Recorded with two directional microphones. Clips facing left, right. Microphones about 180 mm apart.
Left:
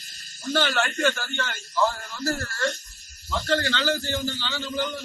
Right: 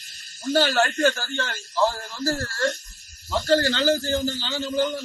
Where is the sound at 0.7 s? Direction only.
40° right (ahead or behind).